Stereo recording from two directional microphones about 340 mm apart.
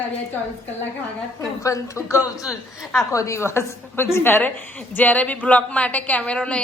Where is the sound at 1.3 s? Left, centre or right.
Centre.